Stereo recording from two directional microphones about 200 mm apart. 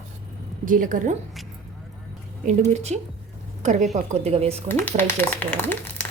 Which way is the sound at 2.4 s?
35° right (ahead or behind).